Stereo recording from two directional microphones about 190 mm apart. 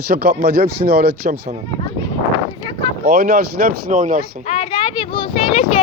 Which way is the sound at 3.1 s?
55° right (ahead or behind).